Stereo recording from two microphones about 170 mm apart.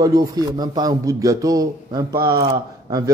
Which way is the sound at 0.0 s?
25° right (ahead or behind).